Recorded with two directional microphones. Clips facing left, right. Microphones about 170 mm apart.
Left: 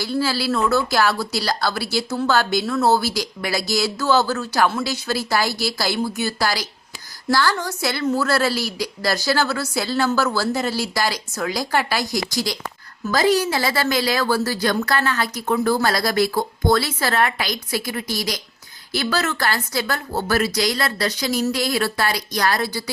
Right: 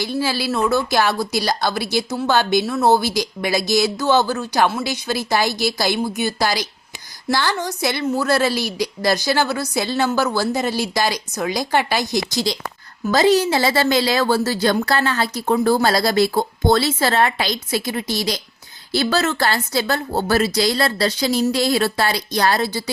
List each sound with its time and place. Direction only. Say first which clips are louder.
0.0 s speech: even; 20° right (ahead or behind)